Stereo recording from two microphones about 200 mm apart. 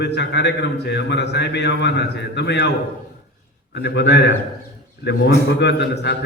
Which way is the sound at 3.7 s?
60° left (ahead or behind).